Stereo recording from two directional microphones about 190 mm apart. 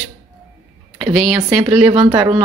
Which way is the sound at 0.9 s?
5° right (ahead or behind).